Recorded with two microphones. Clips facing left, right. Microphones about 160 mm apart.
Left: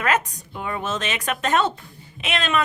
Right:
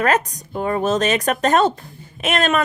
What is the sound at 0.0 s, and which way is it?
Speech, 40° right (ahead or behind).